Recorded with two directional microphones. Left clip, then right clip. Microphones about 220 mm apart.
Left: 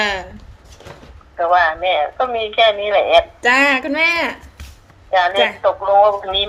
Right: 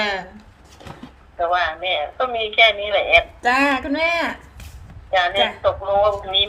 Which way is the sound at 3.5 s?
30° left (ahead or behind).